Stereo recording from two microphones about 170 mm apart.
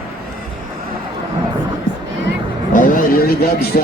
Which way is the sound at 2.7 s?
55° left (ahead or behind).